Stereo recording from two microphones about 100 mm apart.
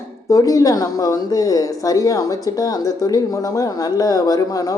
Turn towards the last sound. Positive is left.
turn(degrees=35)  # may be behind; listen again after turning